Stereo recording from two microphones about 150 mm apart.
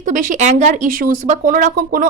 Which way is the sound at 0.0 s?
60° right (ahead or behind).